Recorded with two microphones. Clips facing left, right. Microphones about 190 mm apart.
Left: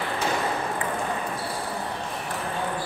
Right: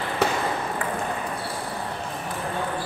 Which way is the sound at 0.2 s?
65° right (ahead or behind).